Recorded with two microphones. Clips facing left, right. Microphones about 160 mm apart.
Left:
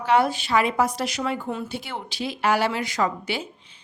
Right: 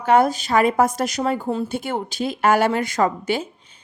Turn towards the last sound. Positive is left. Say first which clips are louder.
# right 5 dB
turn(degrees=-45)  # may be behind; listen again after turning